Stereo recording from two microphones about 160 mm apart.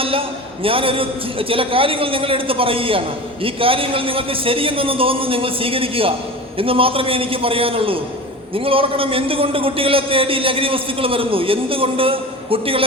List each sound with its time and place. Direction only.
0.0 s a man's voice: 35° right (ahead or behind)